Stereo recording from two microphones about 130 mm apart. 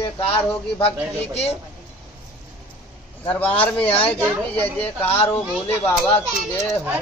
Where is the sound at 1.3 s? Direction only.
50° left (ahead or behind).